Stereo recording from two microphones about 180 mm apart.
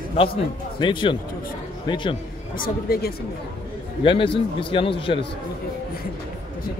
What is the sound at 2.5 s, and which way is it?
Speech, 55° left (ahead or behind).